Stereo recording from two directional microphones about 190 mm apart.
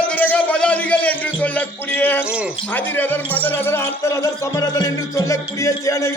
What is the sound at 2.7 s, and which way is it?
A man's voice, 10° left (ahead or behind).